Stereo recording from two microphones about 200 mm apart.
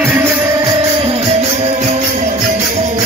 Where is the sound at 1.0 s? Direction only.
30° right (ahead or behind).